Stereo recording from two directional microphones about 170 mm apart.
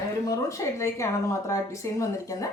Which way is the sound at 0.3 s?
20° left (ahead or behind).